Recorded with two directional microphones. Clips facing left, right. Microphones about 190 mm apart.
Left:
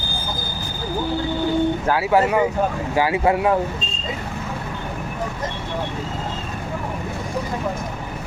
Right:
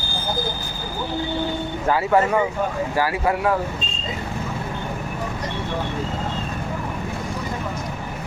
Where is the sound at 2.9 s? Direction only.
20° left (ahead or behind).